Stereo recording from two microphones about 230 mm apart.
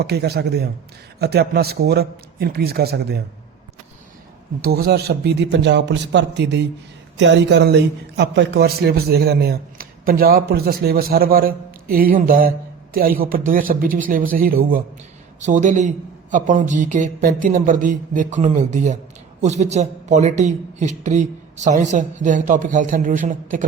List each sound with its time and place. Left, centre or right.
0.0 s speech: right
4.6 s a man's voice: right